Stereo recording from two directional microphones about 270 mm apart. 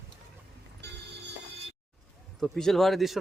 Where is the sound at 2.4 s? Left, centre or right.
Centre.